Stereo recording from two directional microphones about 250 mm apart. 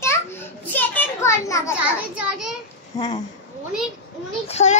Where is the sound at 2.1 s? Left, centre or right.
Centre.